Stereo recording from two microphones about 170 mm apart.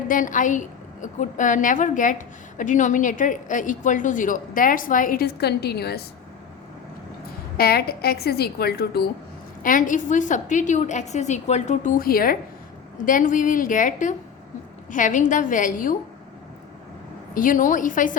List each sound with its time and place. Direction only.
0.1 s a woman's voice: 50° left (ahead or behind); by 6.0 s 70° left (ahead or behind)
7.5 s a woman's voice: 65° left (ahead or behind)
9.6 s a woman's voice: 50° left (ahead or behind)
17.3 s a woman's voice: 50° left (ahead or behind)